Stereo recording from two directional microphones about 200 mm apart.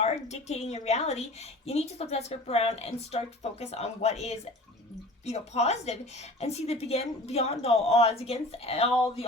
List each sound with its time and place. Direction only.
0.0 s a woman's voice: 35° left (ahead or behind)